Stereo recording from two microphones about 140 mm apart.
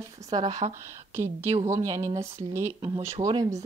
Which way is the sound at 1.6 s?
20° right (ahead or behind).